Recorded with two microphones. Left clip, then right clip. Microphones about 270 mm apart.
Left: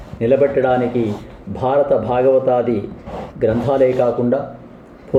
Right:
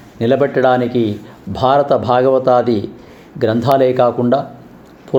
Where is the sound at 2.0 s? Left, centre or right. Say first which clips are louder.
Right 4 dB; right.